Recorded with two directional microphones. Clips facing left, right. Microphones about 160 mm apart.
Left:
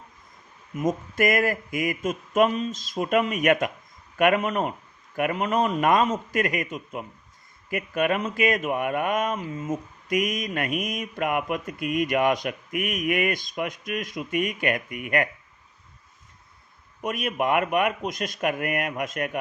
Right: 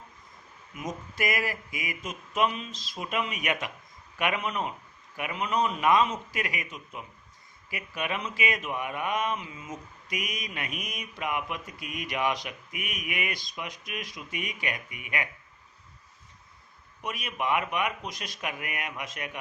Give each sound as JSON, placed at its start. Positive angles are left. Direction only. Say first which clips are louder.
{"t": 0.8, "sound": "speech", "louder": "left 9 dB", "side_deg": 50}
{"t": 17.0, "sound": "speech", "louder": "left 7 dB", "side_deg": 50}